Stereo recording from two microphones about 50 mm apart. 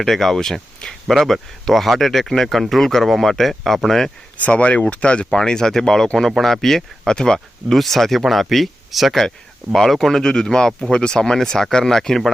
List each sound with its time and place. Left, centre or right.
0.0 s speech: centre
4.4 s speech: left; by 12.3 s centre